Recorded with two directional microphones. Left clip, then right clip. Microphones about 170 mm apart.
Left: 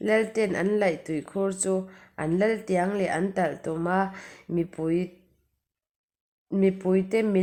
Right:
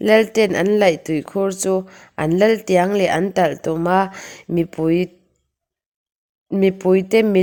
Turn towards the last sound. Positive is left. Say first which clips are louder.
# right 9 dB
turn(degrees=-45)  # may be behind; listen again after turning